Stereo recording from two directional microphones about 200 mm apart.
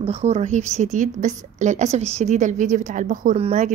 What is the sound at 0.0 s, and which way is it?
A woman's voice, 30° right (ahead or behind).